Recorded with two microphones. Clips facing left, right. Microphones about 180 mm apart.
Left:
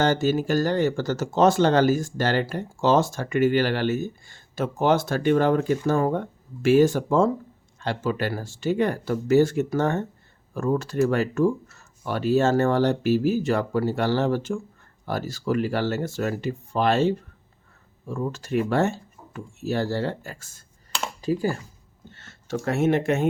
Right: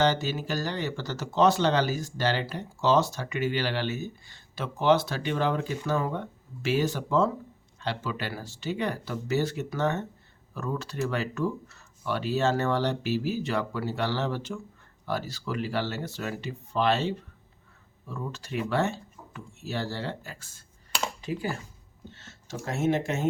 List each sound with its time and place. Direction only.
0.0 s speech: 45° left (ahead or behind)
22.1 s speech: 55° left (ahead or behind)